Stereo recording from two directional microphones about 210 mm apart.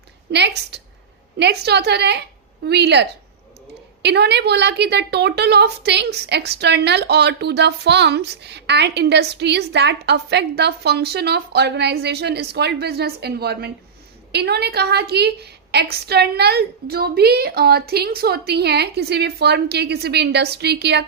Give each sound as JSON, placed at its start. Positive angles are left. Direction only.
{"t": 0.3, "sound": "a woman's voice", "side_deg": -55}